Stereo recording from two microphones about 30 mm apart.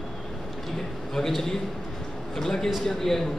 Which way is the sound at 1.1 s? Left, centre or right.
Centre.